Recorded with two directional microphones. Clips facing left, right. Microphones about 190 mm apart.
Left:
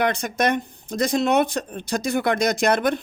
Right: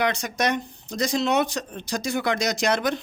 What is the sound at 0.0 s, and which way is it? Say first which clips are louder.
Speech: left 3 dB; 55° left (ahead or behind).